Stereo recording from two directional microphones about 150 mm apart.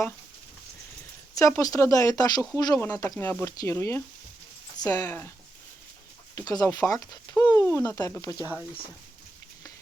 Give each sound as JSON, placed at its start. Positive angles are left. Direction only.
{"t": 1.4, "sound": "speech", "side_deg": 20}
{"t": 6.3, "sound": "speech", "side_deg": 25}